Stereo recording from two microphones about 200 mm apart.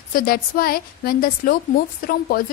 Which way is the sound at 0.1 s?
45° left (ahead or behind).